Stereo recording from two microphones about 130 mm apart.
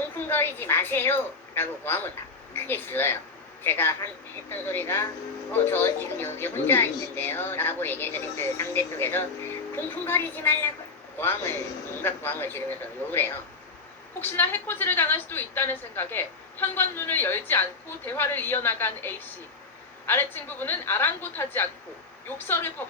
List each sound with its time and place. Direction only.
0.3 s a woman's voice: 15° left (ahead or behind)